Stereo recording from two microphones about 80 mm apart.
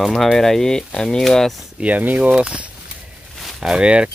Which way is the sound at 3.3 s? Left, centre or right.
Centre.